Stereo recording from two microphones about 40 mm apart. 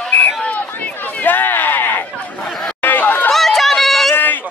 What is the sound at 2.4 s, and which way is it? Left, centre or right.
Chatter, centre.